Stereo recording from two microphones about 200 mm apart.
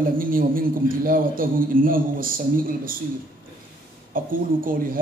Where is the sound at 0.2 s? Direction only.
45° right (ahead or behind).